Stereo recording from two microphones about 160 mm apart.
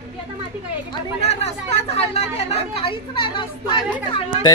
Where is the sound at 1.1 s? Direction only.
40° left (ahead or behind).